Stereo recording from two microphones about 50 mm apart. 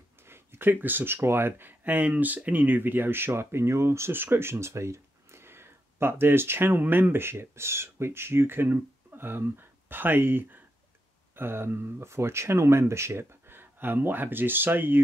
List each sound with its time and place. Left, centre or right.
0.3 s speech: right
4.1 s speech: right